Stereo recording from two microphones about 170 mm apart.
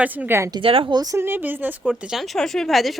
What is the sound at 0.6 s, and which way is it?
Speech, 30° right (ahead or behind).